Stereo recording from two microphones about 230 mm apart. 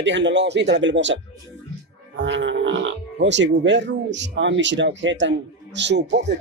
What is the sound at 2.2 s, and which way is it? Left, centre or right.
Music, right.